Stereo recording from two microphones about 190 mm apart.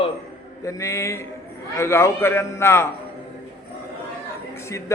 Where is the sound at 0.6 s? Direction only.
15° left (ahead or behind).